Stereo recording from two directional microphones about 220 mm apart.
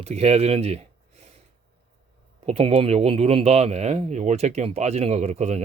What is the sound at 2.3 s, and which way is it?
Speech, 30° right (ahead or behind).